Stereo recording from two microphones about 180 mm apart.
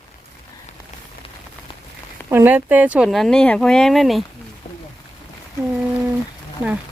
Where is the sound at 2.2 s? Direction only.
10° right (ahead or behind).